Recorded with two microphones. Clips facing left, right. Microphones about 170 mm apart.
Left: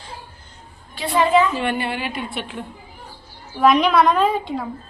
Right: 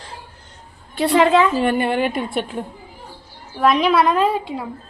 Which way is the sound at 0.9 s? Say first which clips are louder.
Right 3 dB; 70° right (ahead or behind).